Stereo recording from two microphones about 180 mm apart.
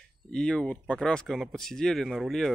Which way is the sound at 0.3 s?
5° left (ahead or behind).